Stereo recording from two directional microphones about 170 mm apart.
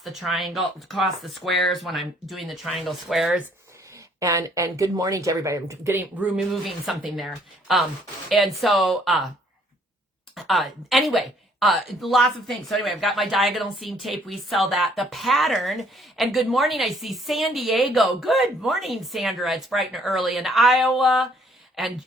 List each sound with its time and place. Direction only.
0.0 s a woman's voice: centre (ahead or behind)
4.2 s a woman's voice: 20° right (ahead or behind); by 9.3 s centre (ahead or behind)
10.3 s a woman's voice: centre (ahead or behind)